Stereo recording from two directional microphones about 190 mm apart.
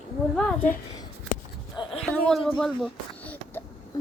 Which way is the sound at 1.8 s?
30° left (ahead or behind).